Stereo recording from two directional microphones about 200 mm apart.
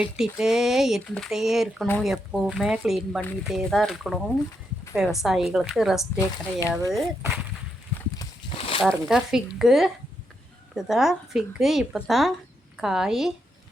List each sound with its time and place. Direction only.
0.0 s speech: 5° right (ahead or behind)
5.2 s speech: centre (ahead or behind)
6.1 s speech: 15° left (ahead or behind)
8.2 s a sound: 25° left (ahead or behind)
8.8 s speech: centre (ahead or behind)